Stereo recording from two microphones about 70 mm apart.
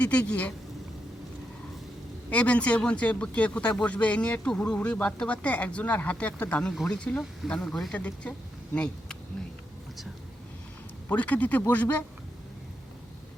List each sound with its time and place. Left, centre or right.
0.0 s speech: centre
2.3 s speech: centre
7.5 s speech: centre
7.9 s speech: centre
11.1 s speech: left